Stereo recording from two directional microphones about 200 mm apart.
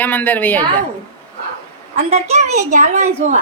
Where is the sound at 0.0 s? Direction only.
10° left (ahead or behind).